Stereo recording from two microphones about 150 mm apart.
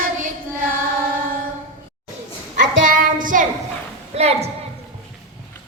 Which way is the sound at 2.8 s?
65° right (ahead or behind).